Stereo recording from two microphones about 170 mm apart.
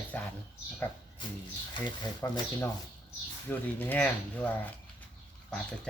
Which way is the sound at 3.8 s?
10° left (ahead or behind).